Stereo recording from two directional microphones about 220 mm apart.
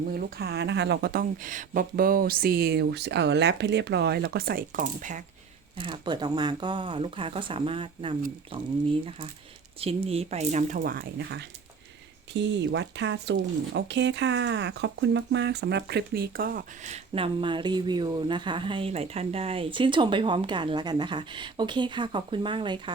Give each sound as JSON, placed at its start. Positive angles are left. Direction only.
{"t": 0.1, "sound": "speech", "side_deg": -45}
{"t": 5.7, "sound": "speech", "side_deg": -20}